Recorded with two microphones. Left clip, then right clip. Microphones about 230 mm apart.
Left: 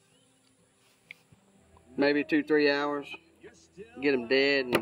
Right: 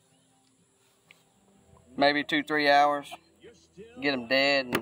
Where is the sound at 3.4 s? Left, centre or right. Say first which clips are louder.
Left 1 dB; centre.